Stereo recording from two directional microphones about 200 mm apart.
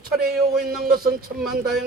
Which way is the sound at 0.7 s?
50° right (ahead or behind).